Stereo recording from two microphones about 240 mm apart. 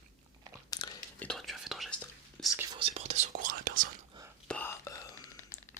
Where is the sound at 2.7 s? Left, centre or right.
Right.